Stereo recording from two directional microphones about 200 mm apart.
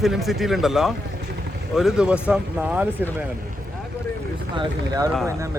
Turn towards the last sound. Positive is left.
turn(degrees=-15)  # may be behind; listen again after turning